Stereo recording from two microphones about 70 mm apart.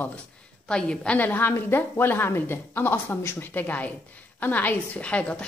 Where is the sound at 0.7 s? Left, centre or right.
Centre.